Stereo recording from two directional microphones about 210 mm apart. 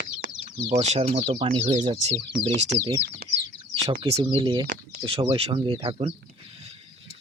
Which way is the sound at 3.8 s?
25° right (ahead or behind).